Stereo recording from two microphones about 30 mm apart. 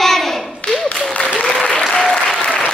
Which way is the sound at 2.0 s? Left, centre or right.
Centre.